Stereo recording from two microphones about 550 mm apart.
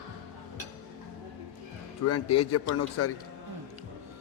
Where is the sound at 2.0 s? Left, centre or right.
Left.